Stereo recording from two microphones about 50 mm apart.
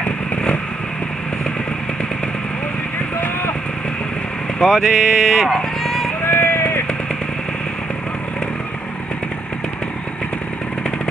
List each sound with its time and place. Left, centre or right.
0.0 s vehicle: left
4.6 s speech: centre
6.2 s a sound: left